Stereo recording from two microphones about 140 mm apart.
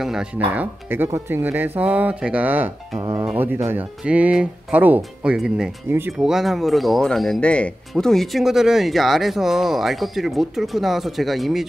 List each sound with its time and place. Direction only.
0.0 s speech: 5° right (ahead or behind)
0.6 s speech: 15° right (ahead or behind)
3.0 s speech: 30° right (ahead or behind)
3.3 s speech: 15° right (ahead or behind)
6.1 s speech: centre (ahead or behind)